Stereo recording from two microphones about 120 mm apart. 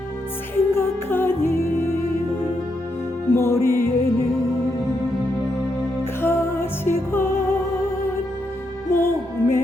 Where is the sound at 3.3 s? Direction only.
20° left (ahead or behind).